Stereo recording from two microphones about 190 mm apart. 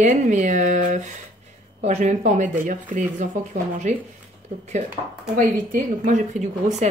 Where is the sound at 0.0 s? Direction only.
40° right (ahead or behind).